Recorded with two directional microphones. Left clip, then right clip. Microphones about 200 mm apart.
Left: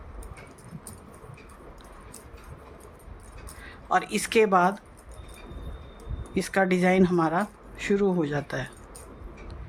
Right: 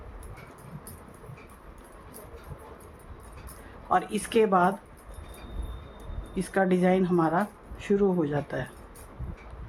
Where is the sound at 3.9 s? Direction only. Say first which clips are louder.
Left 1 dB; 45° left (ahead or behind).